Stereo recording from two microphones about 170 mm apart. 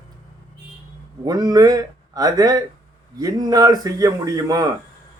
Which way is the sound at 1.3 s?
25° right (ahead or behind).